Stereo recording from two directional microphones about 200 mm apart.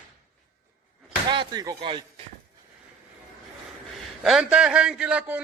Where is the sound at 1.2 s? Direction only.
20° right (ahead or behind).